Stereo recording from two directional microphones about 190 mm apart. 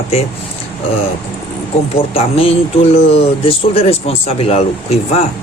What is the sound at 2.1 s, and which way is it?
Speech, 30° left (ahead or behind).